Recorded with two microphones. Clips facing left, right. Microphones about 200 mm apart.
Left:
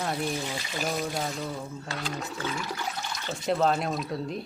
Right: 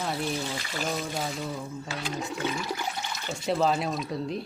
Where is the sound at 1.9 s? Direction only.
10° right (ahead or behind).